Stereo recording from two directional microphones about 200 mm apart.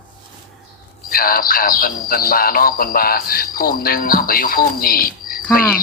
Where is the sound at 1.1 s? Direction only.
45° left (ahead or behind).